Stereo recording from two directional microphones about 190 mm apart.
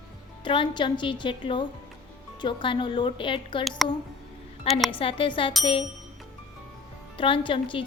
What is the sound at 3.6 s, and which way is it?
Speech, centre (ahead or behind).